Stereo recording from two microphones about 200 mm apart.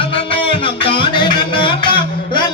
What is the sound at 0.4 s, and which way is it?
Music, 25° left (ahead or behind).